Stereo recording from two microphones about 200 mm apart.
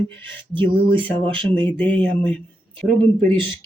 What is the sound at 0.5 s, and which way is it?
Speech, 25° right (ahead or behind).